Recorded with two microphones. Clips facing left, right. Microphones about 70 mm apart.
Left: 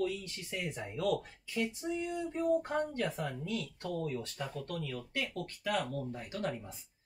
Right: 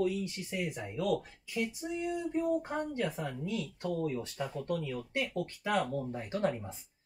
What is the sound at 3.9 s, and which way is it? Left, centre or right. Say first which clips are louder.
Speech: right 2 dB; centre.